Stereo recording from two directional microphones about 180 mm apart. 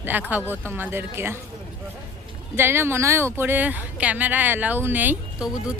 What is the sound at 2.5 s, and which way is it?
A woman's voice, 15° right (ahead or behind).